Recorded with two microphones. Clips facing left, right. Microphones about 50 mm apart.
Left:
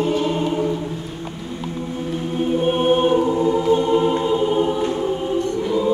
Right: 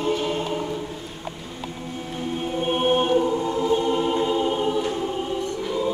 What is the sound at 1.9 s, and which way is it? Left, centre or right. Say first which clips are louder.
Music: left 5 dB; centre.